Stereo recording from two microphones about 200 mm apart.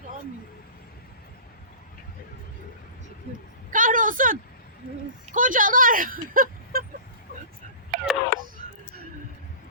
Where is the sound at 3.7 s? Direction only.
40° right (ahead or behind).